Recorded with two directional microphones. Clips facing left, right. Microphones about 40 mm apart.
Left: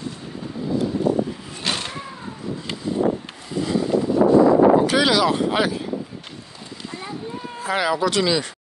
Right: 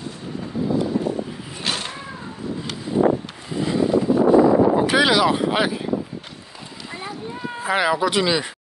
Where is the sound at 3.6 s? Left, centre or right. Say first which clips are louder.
Right 2 dB; centre.